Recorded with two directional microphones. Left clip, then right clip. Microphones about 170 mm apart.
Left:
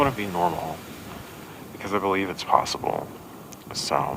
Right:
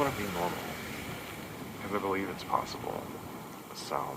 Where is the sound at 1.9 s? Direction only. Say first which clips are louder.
Left 8 dB; 40° left (ahead or behind).